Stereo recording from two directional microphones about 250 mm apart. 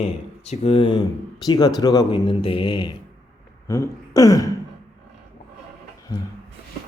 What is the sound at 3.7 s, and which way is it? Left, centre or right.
Throat clearing, centre.